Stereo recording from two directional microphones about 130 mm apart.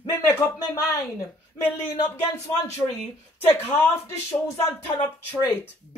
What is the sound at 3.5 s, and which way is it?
Speech, 20° left (ahead or behind).